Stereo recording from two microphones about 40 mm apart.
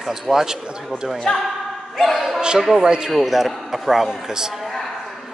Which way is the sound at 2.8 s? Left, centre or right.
Right.